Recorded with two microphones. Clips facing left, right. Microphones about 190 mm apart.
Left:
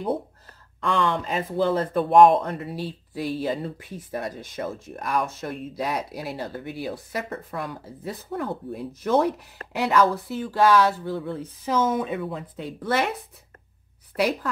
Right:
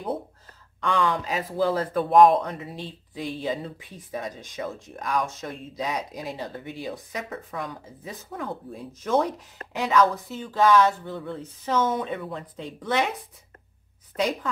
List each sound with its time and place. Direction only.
0.7 s speech: centre (ahead or behind)
14.1 s speech: 5° left (ahead or behind)